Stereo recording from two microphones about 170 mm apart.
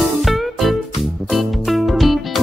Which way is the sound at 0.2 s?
Centre (ahead or behind).